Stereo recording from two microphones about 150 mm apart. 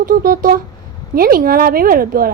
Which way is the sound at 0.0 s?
70° right (ahead or behind).